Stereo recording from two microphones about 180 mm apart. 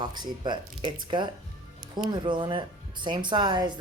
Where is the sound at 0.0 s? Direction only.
25° right (ahead or behind).